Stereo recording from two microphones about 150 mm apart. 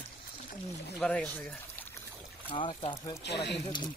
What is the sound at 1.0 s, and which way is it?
Speech, 5° left (ahead or behind).